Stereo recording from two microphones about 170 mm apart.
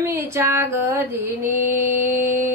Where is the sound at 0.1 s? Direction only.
15° right (ahead or behind).